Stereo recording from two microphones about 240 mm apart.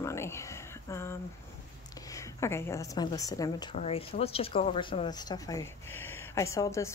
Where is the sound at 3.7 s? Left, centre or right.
Left.